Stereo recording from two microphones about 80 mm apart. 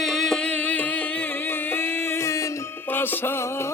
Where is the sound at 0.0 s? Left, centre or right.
Centre; by 2.5 s left.